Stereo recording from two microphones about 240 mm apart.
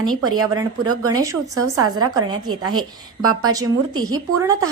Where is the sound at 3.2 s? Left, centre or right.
Right.